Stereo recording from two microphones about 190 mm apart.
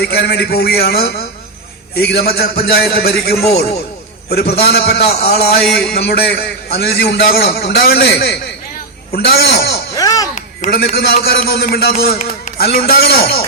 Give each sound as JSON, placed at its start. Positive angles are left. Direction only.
{"t": 0.0, "sound": "a man's voice", "side_deg": 55}
{"t": 9.9, "sound": "a sound", "side_deg": 20}
{"t": 10.3, "sound": "a man's voice", "side_deg": 50}